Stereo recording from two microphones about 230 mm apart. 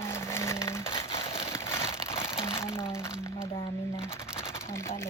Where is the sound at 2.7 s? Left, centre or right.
Centre.